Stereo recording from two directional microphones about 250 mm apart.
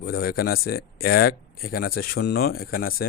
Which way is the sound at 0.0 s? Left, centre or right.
Left.